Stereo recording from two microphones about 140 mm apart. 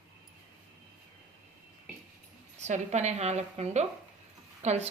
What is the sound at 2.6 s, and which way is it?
A woman's voice, 55° right (ahead or behind).